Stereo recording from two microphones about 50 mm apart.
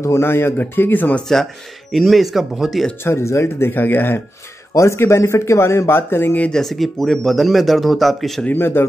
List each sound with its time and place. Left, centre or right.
0.0 s speech: left
1.3 s speech: centre
3.0 s speech: left
4.7 s speech: left
6.5 s speech: centre
8.5 s speech: left